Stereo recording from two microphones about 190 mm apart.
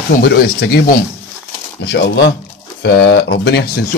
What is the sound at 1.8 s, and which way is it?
Speech, 65° left (ahead or behind).